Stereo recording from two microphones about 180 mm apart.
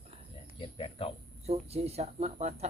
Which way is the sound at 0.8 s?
30° left (ahead or behind).